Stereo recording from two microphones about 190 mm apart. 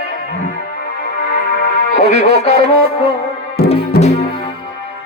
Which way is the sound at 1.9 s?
40° left (ahead or behind).